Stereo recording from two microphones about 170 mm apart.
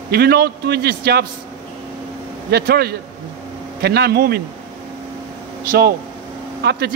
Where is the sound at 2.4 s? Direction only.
65° right (ahead or behind).